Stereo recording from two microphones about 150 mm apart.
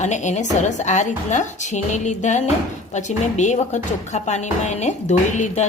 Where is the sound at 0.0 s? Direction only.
50° left (ahead or behind).